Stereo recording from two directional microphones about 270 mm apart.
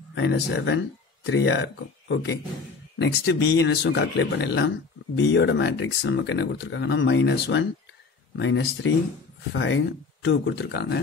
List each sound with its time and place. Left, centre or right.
0.1 s speech: left